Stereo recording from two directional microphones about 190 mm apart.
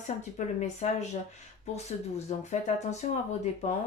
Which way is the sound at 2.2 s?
35° left (ahead or behind).